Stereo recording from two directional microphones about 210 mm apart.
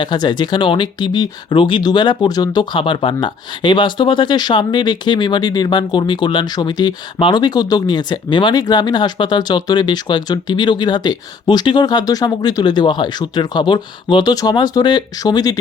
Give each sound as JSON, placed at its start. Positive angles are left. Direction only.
{"t": 0.0, "sound": "speech", "side_deg": 20}